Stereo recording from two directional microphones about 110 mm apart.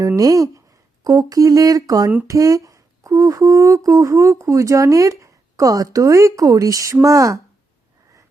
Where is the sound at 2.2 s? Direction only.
30° right (ahead or behind).